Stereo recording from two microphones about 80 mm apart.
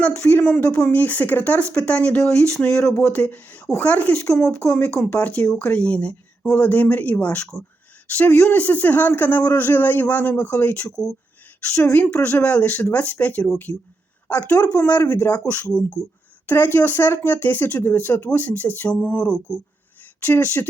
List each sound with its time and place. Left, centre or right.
0.3 s speech: centre
3.0 s speech: centre
10.9 s speech: centre
11.7 s speech: left
14.7 s speech: left
20.2 s speech: left